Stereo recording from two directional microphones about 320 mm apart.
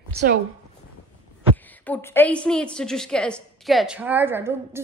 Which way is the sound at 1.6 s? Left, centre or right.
Centre.